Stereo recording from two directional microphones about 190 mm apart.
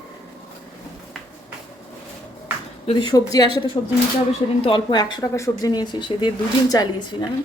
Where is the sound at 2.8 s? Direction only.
25° left (ahead or behind).